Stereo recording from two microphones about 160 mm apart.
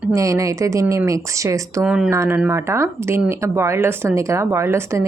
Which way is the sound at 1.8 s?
5° right (ahead or behind).